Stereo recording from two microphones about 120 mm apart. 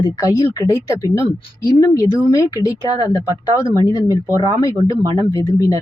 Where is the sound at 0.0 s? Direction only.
30° left (ahead or behind).